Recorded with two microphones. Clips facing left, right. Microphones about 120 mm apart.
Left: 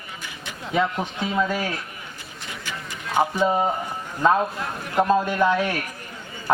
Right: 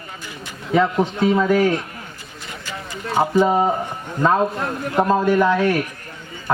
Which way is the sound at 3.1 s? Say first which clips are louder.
Right 4 dB; 40° right (ahead or behind).